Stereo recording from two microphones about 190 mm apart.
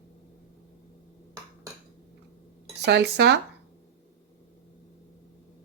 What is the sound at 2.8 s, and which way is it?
Speech, 60° right (ahead or behind).